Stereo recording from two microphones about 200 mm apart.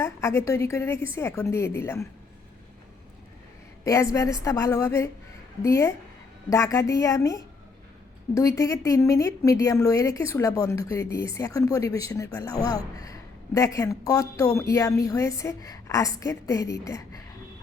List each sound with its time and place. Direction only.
0.0 s a woman's voice: 15° left (ahead or behind)
3.8 s a woman's voice: 15° left (ahead or behind)